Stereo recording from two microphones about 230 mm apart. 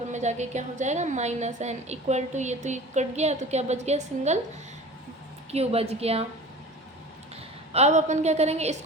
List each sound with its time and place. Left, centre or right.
0.1 s a woman's voice: right
5.5 s a woman's voice: right
7.7 s a woman's voice: right